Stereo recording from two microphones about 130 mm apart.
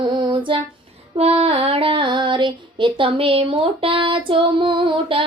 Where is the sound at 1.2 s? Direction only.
50° right (ahead or behind).